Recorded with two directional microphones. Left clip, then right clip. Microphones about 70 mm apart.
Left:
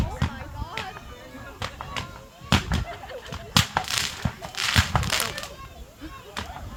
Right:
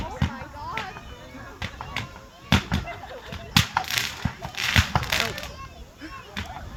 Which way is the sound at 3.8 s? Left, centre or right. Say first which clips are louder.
Even; centre.